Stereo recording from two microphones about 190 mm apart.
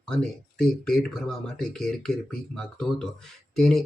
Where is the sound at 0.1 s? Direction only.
5° left (ahead or behind).